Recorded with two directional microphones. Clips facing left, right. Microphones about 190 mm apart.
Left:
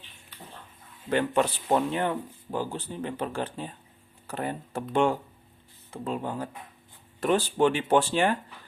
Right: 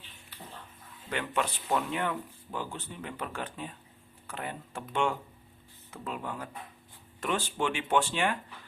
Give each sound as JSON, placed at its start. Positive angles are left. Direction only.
{"t": 1.1, "sound": "speech", "side_deg": 35}